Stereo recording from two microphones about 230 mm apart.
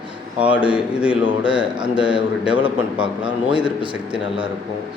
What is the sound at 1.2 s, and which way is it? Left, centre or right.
A man's voice, right.